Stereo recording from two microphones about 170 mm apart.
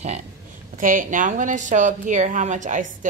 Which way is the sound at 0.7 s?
50° right (ahead or behind).